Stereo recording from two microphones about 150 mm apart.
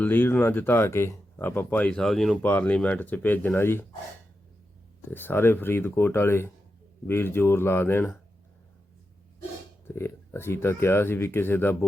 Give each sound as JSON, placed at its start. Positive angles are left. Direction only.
{"t": 0.0, "sound": "speech", "side_deg": 15}
{"t": 2.4, "sound": "speech", "side_deg": 15}
{"t": 5.1, "sound": "speech", "side_deg": 15}
{"t": 9.8, "sound": "speech", "side_deg": 15}